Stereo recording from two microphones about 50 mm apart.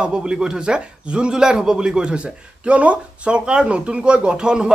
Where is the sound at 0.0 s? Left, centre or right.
Centre.